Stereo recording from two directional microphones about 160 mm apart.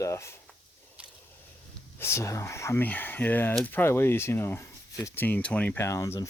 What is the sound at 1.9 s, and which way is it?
Speech, 15° left (ahead or behind).